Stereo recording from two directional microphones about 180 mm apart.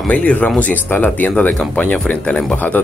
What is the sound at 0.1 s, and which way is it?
Speech, 5° left (ahead or behind).